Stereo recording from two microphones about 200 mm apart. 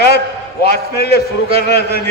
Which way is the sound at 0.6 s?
50° left (ahead or behind).